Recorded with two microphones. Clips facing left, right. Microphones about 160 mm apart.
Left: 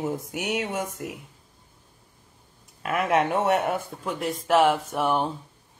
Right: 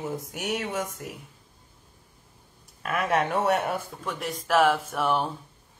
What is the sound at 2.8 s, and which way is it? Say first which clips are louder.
Speech: left 2 dB; 15° left (ahead or behind).